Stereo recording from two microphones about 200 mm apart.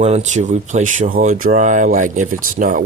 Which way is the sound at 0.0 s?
35° right (ahead or behind).